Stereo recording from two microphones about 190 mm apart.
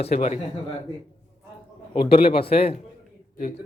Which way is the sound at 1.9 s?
25° left (ahead or behind).